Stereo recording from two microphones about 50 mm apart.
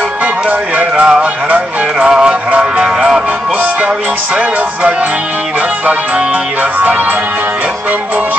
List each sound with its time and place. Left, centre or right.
0.5 s music: right
2.0 s music: centre